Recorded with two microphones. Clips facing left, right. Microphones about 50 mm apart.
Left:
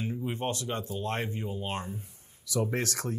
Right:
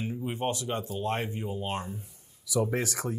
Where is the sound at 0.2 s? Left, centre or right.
Centre.